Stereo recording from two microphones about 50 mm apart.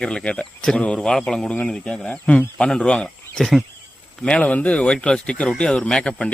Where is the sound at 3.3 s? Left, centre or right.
Centre.